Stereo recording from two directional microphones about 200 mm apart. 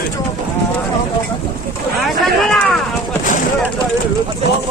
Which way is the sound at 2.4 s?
Centre (ahead or behind).